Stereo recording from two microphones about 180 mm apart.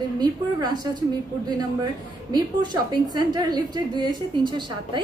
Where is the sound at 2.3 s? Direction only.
25° right (ahead or behind).